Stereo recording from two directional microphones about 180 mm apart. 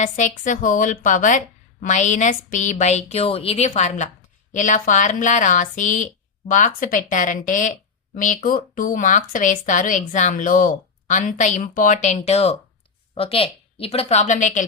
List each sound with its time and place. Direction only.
0.0 s a woman's voice: 45° left (ahead or behind)